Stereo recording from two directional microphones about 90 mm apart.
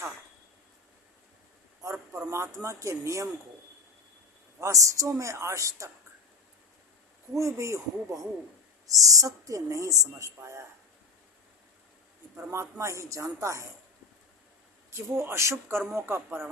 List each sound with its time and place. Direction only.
1.8 s speech: 30° right (ahead or behind)
4.6 s a woman's voice: 35° right (ahead or behind)
7.3 s a woman's voice: 35° right (ahead or behind)
12.4 s a woman's voice: 30° right (ahead or behind)
14.8 s speech: 30° right (ahead or behind)